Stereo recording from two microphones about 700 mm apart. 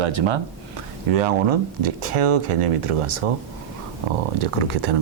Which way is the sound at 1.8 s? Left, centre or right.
Right.